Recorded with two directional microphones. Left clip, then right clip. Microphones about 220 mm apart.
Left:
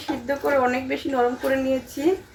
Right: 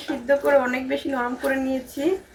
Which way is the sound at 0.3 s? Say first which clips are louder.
Right 3 dB; 20° right (ahead or behind).